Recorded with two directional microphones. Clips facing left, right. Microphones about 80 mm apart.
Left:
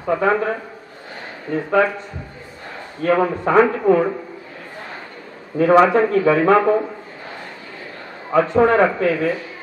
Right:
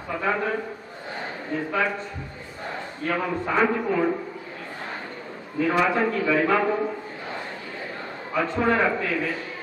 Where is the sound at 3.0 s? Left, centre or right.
Left.